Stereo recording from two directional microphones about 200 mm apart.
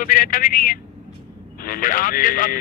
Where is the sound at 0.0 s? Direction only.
45° left (ahead or behind).